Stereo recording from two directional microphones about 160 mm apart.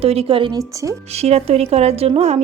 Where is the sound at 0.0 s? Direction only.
40° right (ahead or behind).